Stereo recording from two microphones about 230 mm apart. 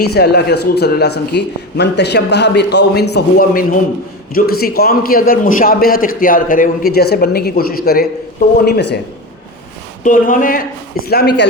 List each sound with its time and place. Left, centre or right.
0.1 s a man's voice: left
10.0 s a man's voice: left